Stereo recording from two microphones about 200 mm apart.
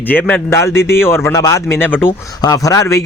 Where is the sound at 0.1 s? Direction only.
10° left (ahead or behind).